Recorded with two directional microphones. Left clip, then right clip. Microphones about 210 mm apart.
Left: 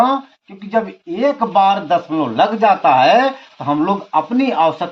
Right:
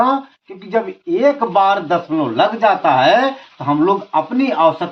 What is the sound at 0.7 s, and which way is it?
Speech, 25° left (ahead or behind).